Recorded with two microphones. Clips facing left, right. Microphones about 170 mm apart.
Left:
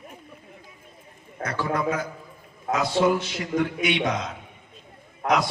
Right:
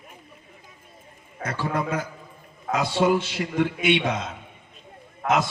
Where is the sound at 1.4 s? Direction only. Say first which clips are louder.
Left 1 dB; 25° right (ahead or behind).